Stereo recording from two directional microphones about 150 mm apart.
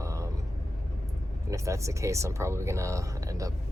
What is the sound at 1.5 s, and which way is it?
Speech, 20° right (ahead or behind).